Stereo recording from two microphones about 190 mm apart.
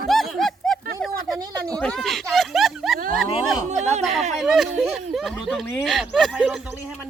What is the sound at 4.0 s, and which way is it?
Speech, centre (ahead or behind).